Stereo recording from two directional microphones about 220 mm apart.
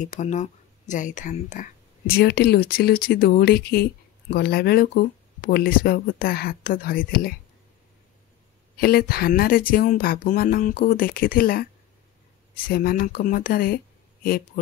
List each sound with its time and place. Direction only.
0.0 s speech: 35° left (ahead or behind)
8.7 s speech: 45° left (ahead or behind)